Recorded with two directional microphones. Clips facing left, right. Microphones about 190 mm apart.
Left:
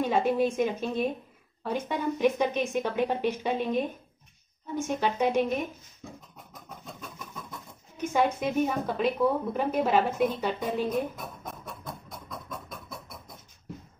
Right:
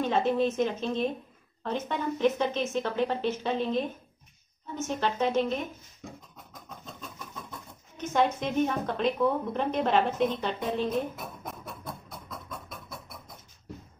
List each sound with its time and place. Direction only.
0.0 s a woman's voice: 10° left (ahead or behind)
8.0 s a woman's voice: 10° left (ahead or behind)
11.8 s a sound: centre (ahead or behind)